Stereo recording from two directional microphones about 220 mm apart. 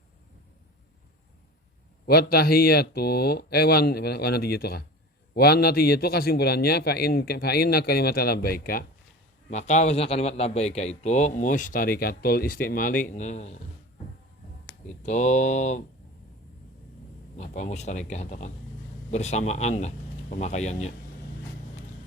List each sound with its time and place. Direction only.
2.0 s a man's voice: 45° left (ahead or behind)
9.5 s a man's voice: 30° left (ahead or behind)
15.0 s a man's voice: 30° left (ahead or behind)
17.3 s a man's voice: 30° left (ahead or behind)